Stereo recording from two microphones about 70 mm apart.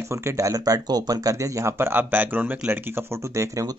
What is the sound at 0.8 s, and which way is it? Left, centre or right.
Speech, right.